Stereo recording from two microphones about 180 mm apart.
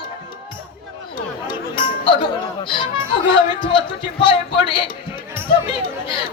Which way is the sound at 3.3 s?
25° left (ahead or behind).